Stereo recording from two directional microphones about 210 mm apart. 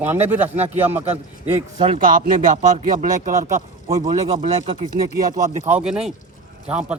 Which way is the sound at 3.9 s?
15° right (ahead or behind).